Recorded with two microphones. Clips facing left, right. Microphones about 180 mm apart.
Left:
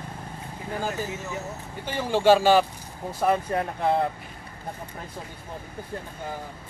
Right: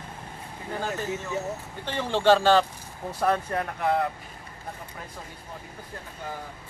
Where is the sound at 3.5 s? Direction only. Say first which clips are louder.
Left 2 dB; 25° left (ahead or behind).